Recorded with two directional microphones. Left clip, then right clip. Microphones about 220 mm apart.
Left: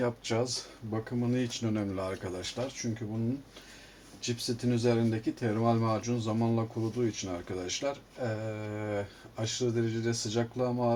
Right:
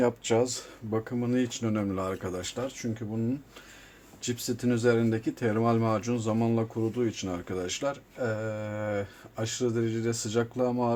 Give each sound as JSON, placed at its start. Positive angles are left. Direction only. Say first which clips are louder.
{"t": 0.0, "sound": "speech", "louder": "right 6 dB", "side_deg": -40}
{"t": 4.2, "sound": "speech", "louder": "right 2 dB", "side_deg": -40}